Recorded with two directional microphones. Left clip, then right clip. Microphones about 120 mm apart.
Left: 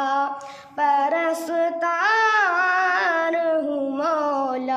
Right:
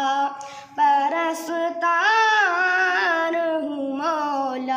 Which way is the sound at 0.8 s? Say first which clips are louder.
Right 1 dB; 35° left (ahead or behind).